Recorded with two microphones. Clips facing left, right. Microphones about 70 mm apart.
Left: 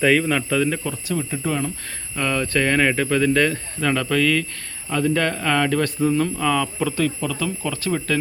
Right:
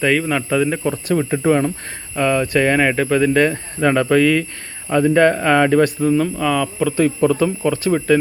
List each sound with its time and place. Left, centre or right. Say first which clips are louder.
0.0 s speech: right 1 dB; centre
1.0 s speech: right 10 dB; right
2.1 s speech: right 5 dB; centre
6.0 s speech: right 3 dB; centre
7.2 s speech: right 9 dB; right
7.9 s speech: right 7 dB; centre